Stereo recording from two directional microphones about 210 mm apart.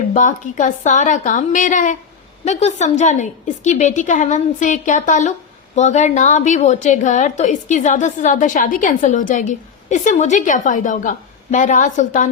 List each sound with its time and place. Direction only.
0.1 s a woman's voice: 35° left (ahead or behind)